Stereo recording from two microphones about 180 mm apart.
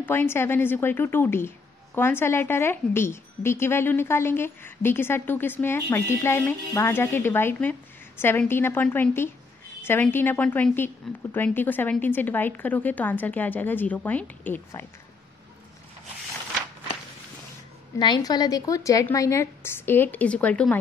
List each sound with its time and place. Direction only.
0.0 s a woman's voice: 10° left (ahead or behind)
17.9 s a woman's voice: 25° left (ahead or behind); by 20.7 s 5° left (ahead or behind)